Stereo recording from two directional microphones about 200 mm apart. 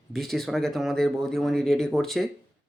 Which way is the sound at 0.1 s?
Centre (ahead or behind).